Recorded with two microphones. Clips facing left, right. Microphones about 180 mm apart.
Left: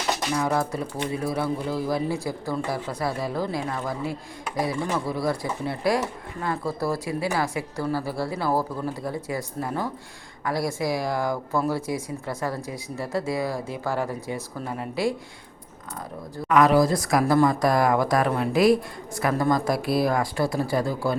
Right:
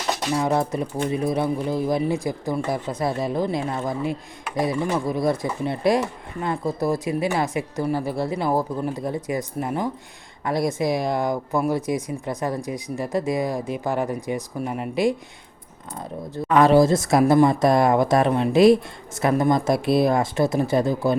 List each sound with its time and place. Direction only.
0.3 s a woman's voice: 25° right (ahead or behind)
16.3 s a woman's voice: 30° right (ahead or behind)